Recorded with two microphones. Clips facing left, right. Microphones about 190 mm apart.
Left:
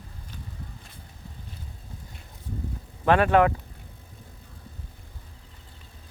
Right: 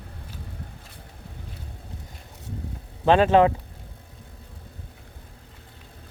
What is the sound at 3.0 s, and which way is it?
Speech, 25° right (ahead or behind).